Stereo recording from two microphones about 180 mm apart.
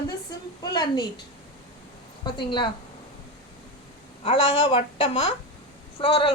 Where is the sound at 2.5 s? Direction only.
25° left (ahead or behind).